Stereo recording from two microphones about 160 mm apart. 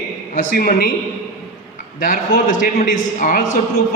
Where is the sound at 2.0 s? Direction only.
55° left (ahead or behind).